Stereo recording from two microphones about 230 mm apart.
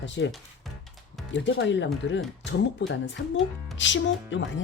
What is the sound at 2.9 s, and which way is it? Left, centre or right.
Speech, left.